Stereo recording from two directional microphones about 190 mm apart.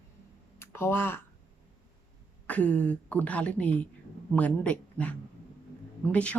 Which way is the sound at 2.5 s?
10° left (ahead or behind).